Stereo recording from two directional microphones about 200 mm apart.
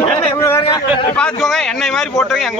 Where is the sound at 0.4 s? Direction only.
15° left (ahead or behind).